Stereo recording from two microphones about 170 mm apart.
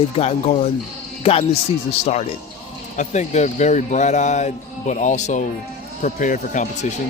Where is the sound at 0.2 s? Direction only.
40° left (ahead or behind).